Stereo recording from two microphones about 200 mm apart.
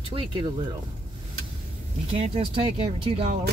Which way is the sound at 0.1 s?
25° right (ahead or behind).